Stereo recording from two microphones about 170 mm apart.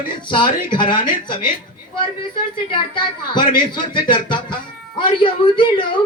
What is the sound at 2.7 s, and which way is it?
A man's voice, 30° left (ahead or behind).